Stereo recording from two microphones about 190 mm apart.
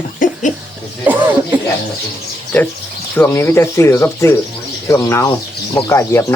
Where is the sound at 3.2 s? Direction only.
10° left (ahead or behind).